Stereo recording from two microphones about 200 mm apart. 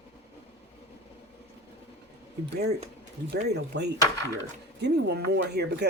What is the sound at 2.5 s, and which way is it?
Speech, 55° right (ahead or behind).